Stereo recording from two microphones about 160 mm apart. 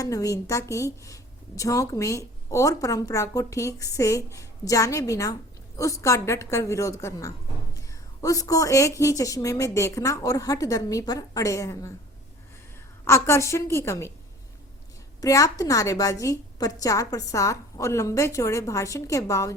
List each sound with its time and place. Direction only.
0.0 s a woman's voice: 20° left (ahead or behind)
13.1 s a woman's voice: 15° left (ahead or behind)
15.2 s a woman's voice: 20° left (ahead or behind)